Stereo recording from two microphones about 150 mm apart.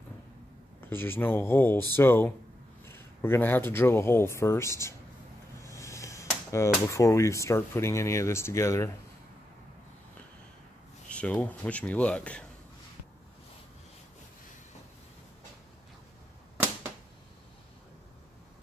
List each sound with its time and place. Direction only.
0.8 s speech: 15° left (ahead or behind)
11.1 s speech: 10° left (ahead or behind)